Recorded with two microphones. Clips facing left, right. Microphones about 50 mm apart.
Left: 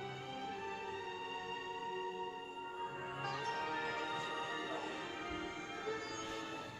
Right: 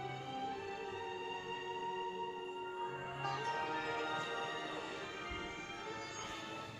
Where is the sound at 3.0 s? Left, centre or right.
Centre.